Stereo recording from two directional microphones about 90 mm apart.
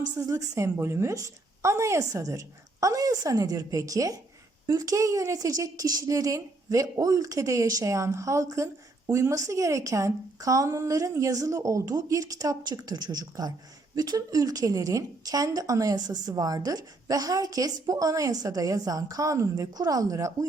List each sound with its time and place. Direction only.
0.2 s speech: 40° right (ahead or behind)